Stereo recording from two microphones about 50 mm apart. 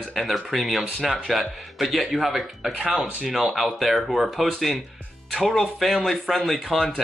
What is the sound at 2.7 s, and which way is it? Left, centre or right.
Speech, centre.